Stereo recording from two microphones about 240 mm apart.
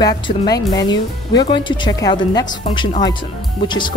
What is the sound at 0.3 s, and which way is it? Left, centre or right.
Speech, left.